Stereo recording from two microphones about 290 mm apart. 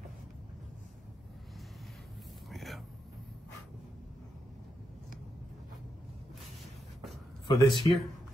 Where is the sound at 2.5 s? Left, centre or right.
Centre.